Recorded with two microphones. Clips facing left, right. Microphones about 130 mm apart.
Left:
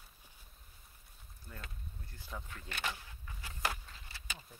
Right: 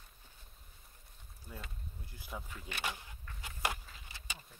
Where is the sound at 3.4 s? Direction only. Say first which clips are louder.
Right 1 dB; 20° right (ahead or behind).